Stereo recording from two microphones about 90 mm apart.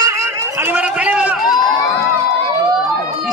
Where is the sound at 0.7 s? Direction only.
15° right (ahead or behind).